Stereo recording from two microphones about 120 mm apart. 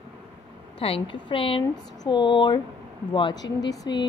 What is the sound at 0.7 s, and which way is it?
A woman's voice, 50° left (ahead or behind).